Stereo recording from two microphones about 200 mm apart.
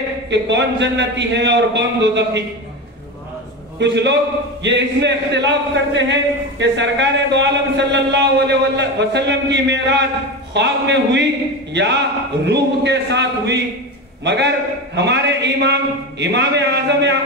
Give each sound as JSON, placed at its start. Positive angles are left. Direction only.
{"t": 0.3, "sound": "a man's voice", "side_deg": -60}
{"t": 3.8, "sound": "a man's voice", "side_deg": -60}